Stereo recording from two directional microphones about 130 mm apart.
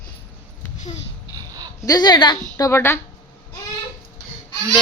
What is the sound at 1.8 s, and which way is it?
Speech, 30° left (ahead or behind).